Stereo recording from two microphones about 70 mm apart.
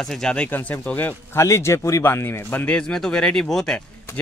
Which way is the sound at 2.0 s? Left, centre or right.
Left.